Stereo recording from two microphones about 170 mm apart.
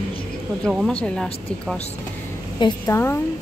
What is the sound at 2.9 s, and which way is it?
Speech, 15° left (ahead or behind).